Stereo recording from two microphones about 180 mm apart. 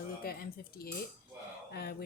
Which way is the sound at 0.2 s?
55° left (ahead or behind).